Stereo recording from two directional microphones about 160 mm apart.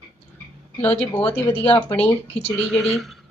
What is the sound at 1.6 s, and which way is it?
Speech, 35° left (ahead or behind).